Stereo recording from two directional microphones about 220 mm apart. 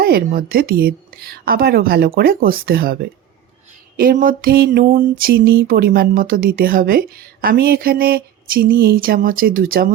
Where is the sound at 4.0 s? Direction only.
40° right (ahead or behind).